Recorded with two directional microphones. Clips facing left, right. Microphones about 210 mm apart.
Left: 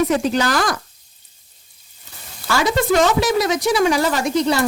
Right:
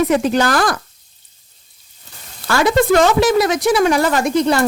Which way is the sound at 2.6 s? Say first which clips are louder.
Right 4 dB; 55° right (ahead or behind).